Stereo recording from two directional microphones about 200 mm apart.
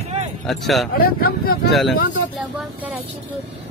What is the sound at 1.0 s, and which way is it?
Speech, 50° left (ahead or behind).